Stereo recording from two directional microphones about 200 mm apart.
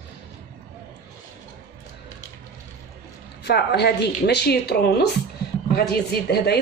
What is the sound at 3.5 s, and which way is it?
A woman's voice, 55° left (ahead or behind).